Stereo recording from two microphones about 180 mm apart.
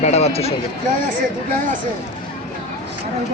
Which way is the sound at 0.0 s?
35° left (ahead or behind).